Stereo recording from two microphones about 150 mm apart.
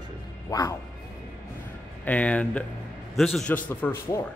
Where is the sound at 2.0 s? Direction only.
10° left (ahead or behind).